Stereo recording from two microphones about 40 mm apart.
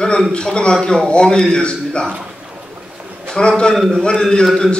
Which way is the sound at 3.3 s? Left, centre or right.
Left.